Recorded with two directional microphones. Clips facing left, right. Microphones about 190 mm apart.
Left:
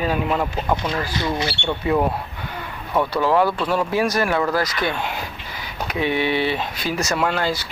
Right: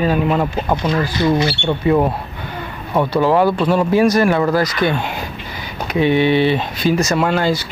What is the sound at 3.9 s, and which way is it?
Speech, 5° left (ahead or behind).